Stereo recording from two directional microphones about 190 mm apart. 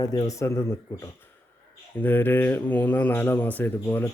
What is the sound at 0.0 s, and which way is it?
Speech, 20° left (ahead or behind).